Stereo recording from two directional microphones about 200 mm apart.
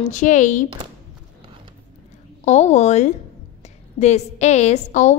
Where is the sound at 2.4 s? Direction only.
35° left (ahead or behind).